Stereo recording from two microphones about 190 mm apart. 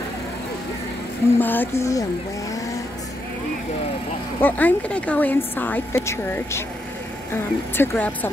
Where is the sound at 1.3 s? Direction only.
10° left (ahead or behind).